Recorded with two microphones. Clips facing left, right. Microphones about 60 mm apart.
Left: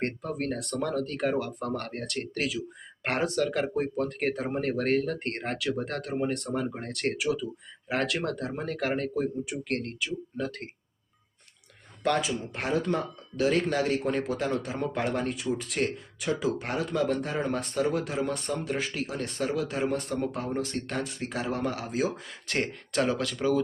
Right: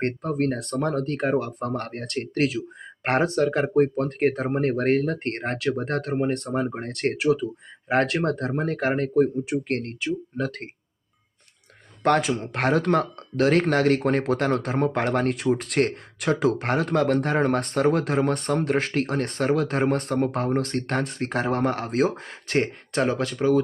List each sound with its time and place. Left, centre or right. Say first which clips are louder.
0.0 s speech: right 7 dB; right
12.0 s speech: right 6 dB; right
12.3 s speech: right 6 dB; right
22.4 s speech: right 6 dB; right